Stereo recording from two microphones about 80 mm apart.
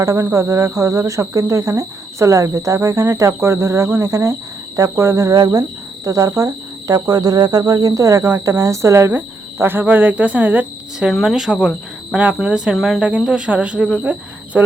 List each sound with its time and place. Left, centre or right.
0.0 s speech: right
11.1 s speech: centre
13.0 s speech: centre